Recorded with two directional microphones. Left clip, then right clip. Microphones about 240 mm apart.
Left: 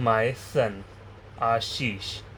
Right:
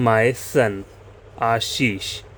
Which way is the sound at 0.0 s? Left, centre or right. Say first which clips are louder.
Right 6 dB; right.